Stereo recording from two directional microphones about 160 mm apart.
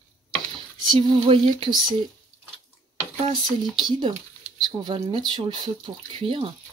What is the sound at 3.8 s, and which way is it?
Speech, 30° right (ahead or behind).